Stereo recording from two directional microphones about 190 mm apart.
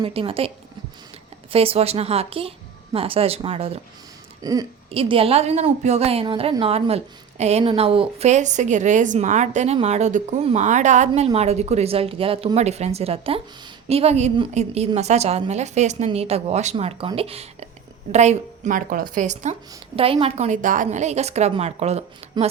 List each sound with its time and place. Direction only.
0.0 s a woman's voice: 30° right (ahead or behind)